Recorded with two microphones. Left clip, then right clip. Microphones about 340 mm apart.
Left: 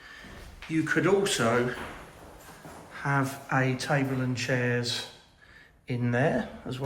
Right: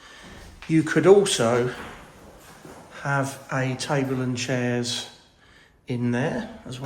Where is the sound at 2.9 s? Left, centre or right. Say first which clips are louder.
Right 3 dB; centre.